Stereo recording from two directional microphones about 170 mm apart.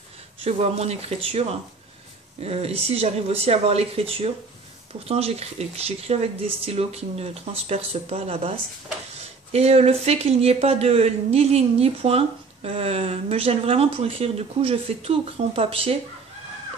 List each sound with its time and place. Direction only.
0.4 s speech: 35° right (ahead or behind)